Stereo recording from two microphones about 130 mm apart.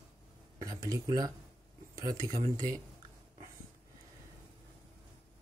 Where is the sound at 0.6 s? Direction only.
30° right (ahead or behind).